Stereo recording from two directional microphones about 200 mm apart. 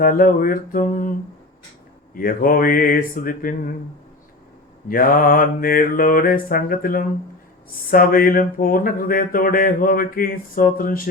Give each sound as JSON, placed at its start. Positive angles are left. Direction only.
{"t": 0.0, "sound": "speech", "side_deg": 45}
{"t": 2.1, "sound": "speech", "side_deg": 45}
{"t": 4.9, "sound": "speech", "side_deg": 45}